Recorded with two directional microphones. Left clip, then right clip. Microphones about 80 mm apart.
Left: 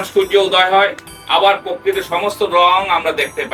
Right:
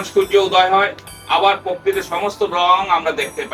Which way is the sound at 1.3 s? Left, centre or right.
Centre.